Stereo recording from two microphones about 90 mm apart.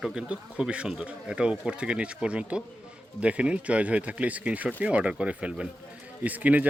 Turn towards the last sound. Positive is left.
turn(degrees=-15)  # may be behind; listen again after turning